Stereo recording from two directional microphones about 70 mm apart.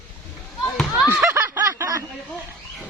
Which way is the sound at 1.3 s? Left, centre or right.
Right.